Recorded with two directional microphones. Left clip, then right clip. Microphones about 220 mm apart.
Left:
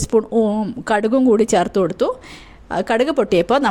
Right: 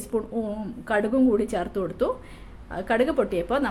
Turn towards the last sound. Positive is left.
turn(degrees=40)  # may be behind; listen again after turning